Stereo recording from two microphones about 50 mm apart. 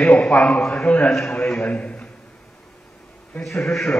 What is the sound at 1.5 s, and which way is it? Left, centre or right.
Speech, left.